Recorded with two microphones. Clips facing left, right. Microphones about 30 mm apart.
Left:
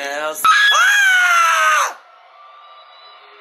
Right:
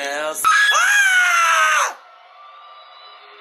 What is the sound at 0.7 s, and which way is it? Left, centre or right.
Screaming, centre.